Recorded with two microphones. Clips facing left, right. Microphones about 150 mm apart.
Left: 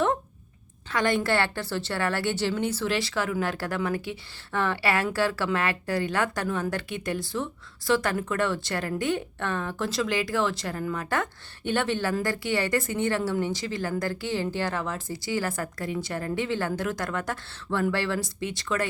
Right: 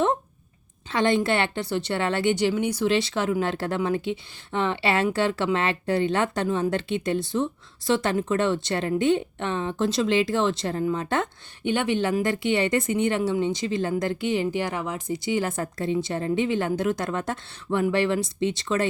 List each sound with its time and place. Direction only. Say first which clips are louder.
0.9 s a woman's voice: right 3 dB; 25° right (ahead or behind)